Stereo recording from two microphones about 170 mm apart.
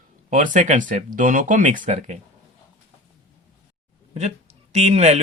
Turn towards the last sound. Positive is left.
turn(degrees=-40)  # may be behind; listen again after turning